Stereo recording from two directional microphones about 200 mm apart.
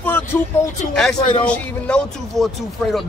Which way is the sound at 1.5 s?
5° left (ahead or behind).